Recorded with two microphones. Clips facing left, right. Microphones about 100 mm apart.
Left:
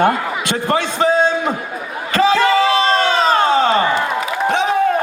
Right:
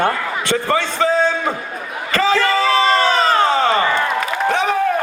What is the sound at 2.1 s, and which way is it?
Crowd, 20° left (ahead or behind).